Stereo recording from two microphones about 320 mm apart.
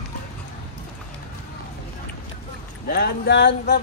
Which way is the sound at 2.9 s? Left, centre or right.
Left.